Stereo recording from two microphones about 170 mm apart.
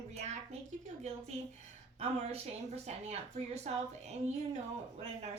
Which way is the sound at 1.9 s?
35° right (ahead or behind).